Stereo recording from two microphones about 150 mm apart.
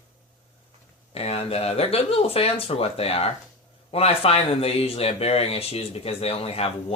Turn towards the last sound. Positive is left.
turn(degrees=40)  # may be behind; listen again after turning